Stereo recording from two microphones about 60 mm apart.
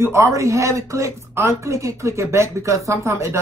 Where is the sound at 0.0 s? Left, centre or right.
Right.